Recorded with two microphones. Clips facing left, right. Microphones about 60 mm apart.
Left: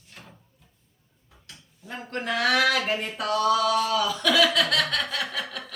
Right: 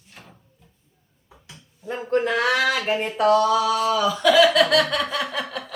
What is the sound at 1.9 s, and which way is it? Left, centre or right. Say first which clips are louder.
Speech: right 8 dB; right.